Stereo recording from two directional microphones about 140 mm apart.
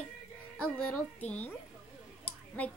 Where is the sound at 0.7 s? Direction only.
10° left (ahead or behind).